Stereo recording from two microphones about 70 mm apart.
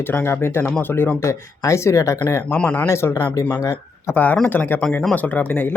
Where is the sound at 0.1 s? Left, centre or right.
Left.